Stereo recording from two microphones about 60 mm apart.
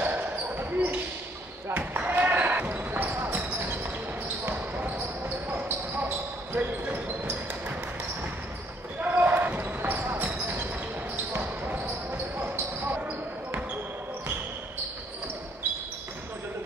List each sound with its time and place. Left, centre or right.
0.0 s basketball bounce: right
4.5 s basketball bounce: right
9.1 s basketball bounce: right